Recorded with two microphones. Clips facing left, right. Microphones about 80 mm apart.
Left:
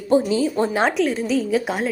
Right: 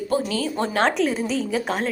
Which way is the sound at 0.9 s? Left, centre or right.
Centre.